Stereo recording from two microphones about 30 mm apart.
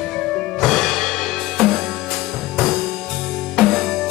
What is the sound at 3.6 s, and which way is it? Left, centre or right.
Music, centre.